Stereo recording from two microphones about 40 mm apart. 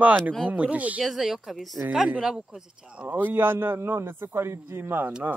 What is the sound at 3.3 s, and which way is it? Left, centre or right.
A man's voice, right.